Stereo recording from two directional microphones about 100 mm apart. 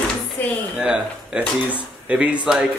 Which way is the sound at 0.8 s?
10° right (ahead or behind).